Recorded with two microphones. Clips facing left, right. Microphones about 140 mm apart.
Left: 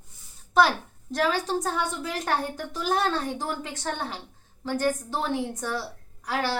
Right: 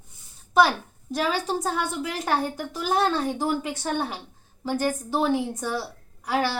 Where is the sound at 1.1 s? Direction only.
10° right (ahead or behind).